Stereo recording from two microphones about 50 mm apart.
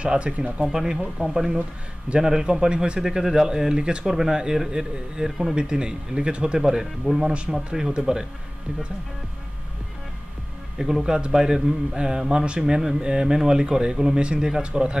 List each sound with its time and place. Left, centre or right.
0.0 s speech: right
0.7 s speech: centre
10.8 s speech: centre